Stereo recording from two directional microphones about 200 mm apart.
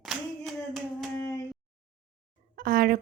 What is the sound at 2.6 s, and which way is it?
Speech, 45° right (ahead or behind).